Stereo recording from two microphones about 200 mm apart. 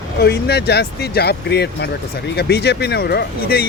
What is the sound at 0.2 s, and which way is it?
Speech, 55° left (ahead or behind).